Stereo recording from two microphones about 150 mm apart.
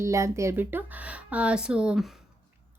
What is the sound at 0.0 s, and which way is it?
A woman's voice, 20° right (ahead or behind).